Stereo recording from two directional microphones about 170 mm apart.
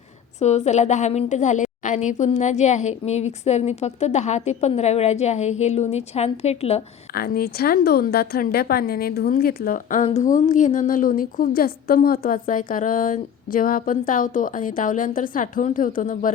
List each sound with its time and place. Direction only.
0.3 s a woman's voice: 40° left (ahead or behind)
7.1 s a woman's voice: 60° left (ahead or behind)